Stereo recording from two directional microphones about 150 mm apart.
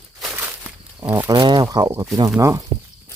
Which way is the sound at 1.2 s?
30° right (ahead or behind).